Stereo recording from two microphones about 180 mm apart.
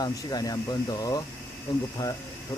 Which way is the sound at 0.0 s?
20° left (ahead or behind).